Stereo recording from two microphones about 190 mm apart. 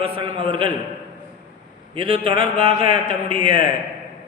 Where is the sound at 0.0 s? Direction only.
30° right (ahead or behind).